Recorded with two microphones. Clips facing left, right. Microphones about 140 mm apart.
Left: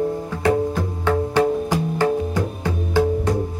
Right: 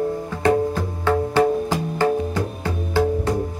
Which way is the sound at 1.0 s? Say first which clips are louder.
Right 1 dB; 15° left (ahead or behind).